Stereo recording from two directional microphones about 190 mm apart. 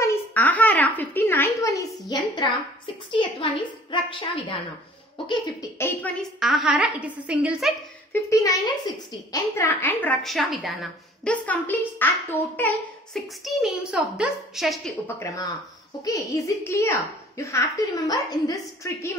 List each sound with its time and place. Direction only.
0.0 s a sound: 10° left (ahead or behind)
3.1 s a woman's voice: 25° left (ahead or behind)
6.4 s a woman's voice: centre (ahead or behind)
8.1 s a woman's voice: 15° left (ahead or behind); by 14.8 s centre (ahead or behind)
15.0 s a woman's voice: 15° left (ahead or behind)